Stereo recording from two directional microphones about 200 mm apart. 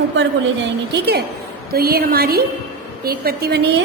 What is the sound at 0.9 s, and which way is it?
A woman's voice, 55° right (ahead or behind).